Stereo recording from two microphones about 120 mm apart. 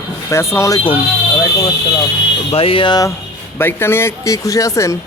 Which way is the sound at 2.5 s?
50° left (ahead or behind).